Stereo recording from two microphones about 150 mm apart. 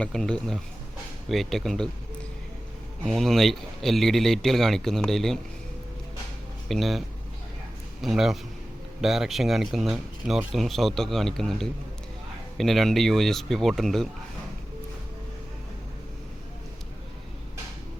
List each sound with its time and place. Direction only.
0.0 s speech: 5° left (ahead or behind)
3.1 s speech: centre (ahead or behind)
6.7 s speech: centre (ahead or behind)
8.0 s speech: centre (ahead or behind)